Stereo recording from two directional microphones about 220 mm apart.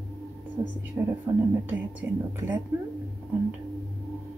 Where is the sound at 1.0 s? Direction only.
10° right (ahead or behind).